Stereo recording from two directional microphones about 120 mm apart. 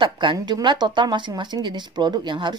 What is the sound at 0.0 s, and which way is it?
Speech, 40° right (ahead or behind).